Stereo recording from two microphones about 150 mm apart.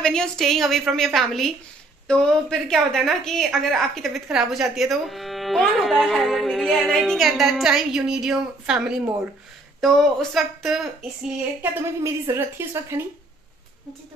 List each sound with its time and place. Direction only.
0.0 s a woman's voice: 5° left (ahead or behind)
12.0 s a woman's voice: 15° right (ahead or behind)